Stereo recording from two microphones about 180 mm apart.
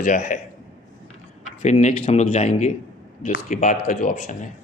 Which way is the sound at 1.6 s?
40° left (ahead or behind).